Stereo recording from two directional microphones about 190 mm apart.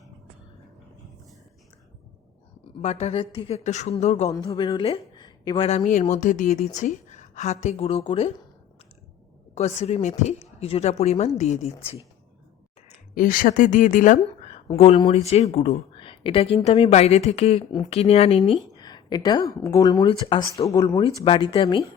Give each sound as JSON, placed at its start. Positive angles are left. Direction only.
{"t": 2.8, "sound": "a woman's voice", "side_deg": 35}
{"t": 4.3, "sound": "a woman's voice", "side_deg": 25}
{"t": 9.6, "sound": "a woman's voice", "side_deg": 35}
{"t": 13.1, "sound": "a woman's voice", "side_deg": 45}
{"t": 17.7, "sound": "speech", "side_deg": 20}
{"t": 17.9, "sound": "a woman's voice", "side_deg": 35}
{"t": 18.4, "sound": "speech", "side_deg": 0}
{"t": 18.8, "sound": "speech", "side_deg": 20}